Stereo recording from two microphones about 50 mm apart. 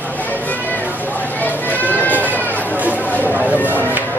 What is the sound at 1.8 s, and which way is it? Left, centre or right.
Run, left.